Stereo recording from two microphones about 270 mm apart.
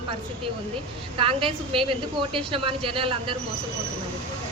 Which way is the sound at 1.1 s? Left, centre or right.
Centre.